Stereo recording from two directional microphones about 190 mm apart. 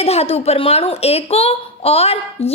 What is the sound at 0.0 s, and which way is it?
Speech, 30° left (ahead or behind).